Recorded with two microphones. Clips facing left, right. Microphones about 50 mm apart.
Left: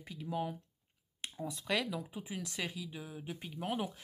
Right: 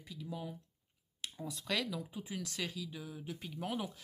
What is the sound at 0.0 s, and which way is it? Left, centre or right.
Speech, left.